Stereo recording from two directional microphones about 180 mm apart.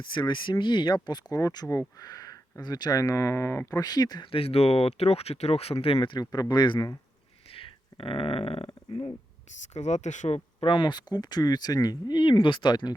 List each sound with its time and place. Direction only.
0.0 s speech: 25° left (ahead or behind)